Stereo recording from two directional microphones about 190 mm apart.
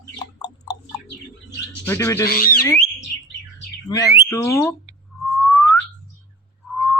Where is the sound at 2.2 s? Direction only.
50° left (ahead or behind).